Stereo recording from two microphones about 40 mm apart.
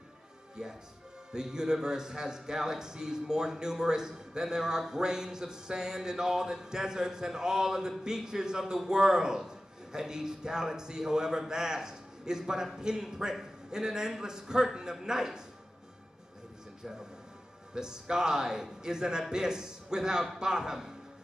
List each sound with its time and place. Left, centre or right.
0.6 s a man's voice: centre
17.7 s a man's voice: centre